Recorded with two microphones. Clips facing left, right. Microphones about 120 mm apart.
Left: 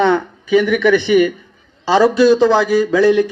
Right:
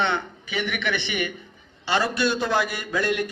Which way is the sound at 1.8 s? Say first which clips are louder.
Left 12 dB; 90° left.